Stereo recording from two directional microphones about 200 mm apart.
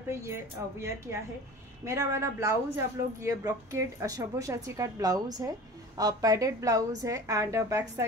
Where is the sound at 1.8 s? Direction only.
15° right (ahead or behind).